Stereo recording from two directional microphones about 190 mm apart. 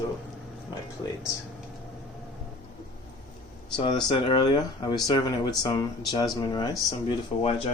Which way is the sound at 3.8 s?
25° left (ahead or behind).